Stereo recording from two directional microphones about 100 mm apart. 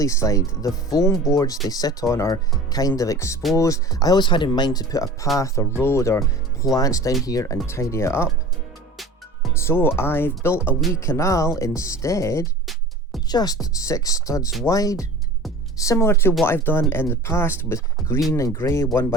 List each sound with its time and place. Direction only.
0.0 s speech: 30° left (ahead or behind)
9.6 s speech: 25° left (ahead or behind)
13.2 s speech: 40° left (ahead or behind)